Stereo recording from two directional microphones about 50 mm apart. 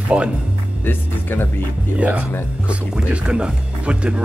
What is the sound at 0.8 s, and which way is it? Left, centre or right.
Speech, left.